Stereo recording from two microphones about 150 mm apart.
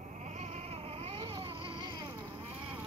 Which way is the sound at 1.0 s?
40° right (ahead or behind).